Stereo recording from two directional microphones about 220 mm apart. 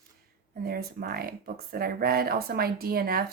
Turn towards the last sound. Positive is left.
turn(degrees=-45)  # may be behind; listen again after turning